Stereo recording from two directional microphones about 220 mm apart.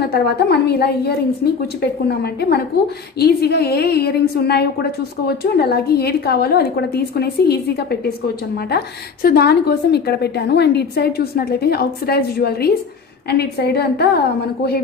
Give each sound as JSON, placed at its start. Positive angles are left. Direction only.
{"t": 0.1, "sound": "a woman's voice", "side_deg": 45}